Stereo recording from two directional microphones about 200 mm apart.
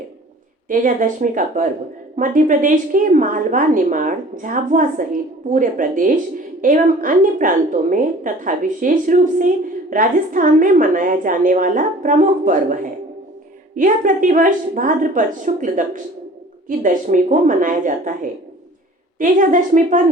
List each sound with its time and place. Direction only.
0.7 s a woman's voice: 40° right (ahead or behind)